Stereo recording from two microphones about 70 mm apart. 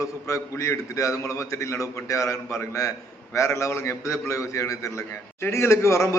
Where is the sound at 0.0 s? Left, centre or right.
Left.